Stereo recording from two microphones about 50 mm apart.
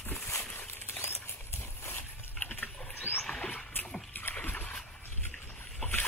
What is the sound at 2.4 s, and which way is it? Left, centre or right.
Pig, left.